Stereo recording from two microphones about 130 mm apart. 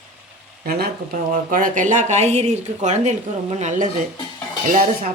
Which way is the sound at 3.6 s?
70° right (ahead or behind).